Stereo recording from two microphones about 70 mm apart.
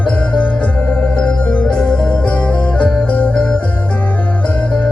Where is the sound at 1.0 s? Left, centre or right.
Left.